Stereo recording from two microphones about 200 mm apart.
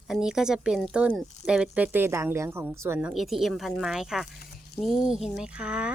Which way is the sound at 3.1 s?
Centre (ahead or behind).